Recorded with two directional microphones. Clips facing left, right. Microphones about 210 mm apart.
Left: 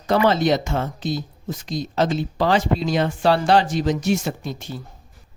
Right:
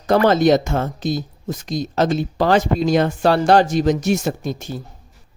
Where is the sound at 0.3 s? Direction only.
45° right (ahead or behind).